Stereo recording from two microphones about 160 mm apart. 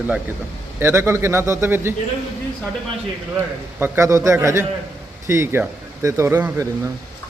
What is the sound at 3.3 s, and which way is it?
A man's voice, 15° right (ahead or behind).